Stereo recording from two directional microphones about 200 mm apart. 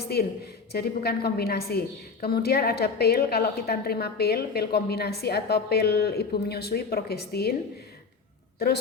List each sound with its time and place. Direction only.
0.1 s a woman's voice: 55° left (ahead or behind)
8.5 s a woman's voice: 50° left (ahead or behind)